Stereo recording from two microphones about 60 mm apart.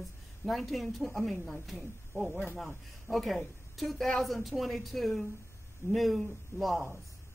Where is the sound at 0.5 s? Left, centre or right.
Centre.